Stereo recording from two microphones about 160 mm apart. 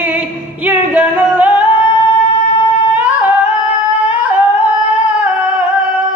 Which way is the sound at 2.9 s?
10° right (ahead or behind).